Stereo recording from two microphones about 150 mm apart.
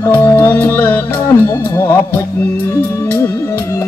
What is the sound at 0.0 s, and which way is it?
Music, 15° left (ahead or behind).